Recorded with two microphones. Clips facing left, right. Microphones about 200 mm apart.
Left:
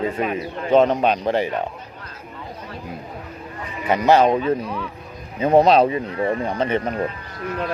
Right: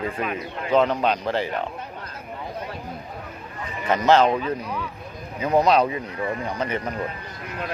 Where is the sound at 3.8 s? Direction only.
15° left (ahead or behind).